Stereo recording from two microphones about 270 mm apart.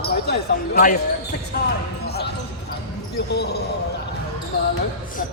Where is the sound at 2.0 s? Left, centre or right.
Left.